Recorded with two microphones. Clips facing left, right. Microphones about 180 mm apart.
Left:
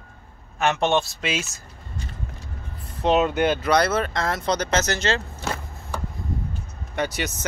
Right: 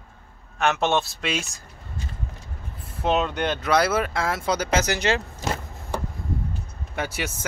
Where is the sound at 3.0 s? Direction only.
5° left (ahead or behind); by 5.2 s 15° right (ahead or behind).